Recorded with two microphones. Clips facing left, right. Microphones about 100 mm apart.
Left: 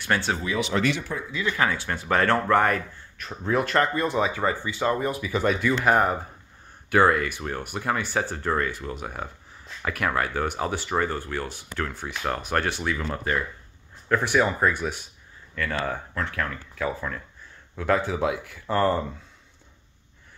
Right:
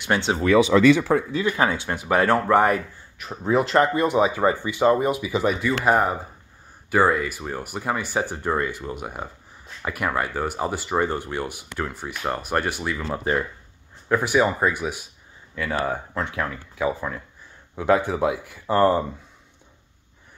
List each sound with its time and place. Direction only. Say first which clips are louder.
0.0 s speech: right 3 dB; 20° right (ahead or behind)
1.1 s speech: right 11 dB; 80° right
1.4 s speech: right 3 dB; 20° right (ahead or behind)
11.0 s speech: right 4 dB; 20° right (ahead or behind); by 13.2 s 5° right (ahead or behind)
13.2 s speech: right 6 dB; 25° right (ahead or behind)
14.0 s speech: right 2 dB; 10° right (ahead or behind)